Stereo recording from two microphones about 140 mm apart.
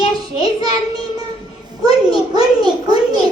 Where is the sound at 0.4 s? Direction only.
30° right (ahead or behind).